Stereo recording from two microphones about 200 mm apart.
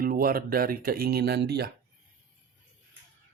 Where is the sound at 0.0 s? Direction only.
45° right (ahead or behind).